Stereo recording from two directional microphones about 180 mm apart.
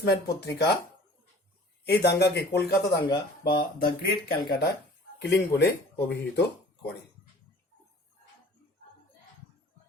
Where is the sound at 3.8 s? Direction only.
60° left (ahead or behind).